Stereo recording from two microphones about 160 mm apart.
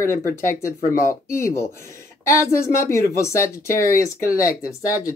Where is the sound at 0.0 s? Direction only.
20° left (ahead or behind).